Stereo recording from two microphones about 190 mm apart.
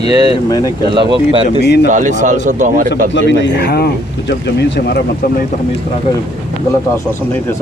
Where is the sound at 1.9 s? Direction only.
40° right (ahead or behind).